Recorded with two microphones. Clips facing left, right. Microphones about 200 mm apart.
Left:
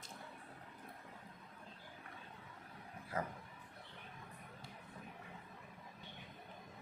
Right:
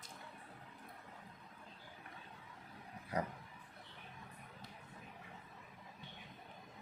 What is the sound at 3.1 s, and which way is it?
Speech, 15° right (ahead or behind).